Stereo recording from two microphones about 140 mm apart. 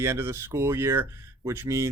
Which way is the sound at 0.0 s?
15° right (ahead or behind).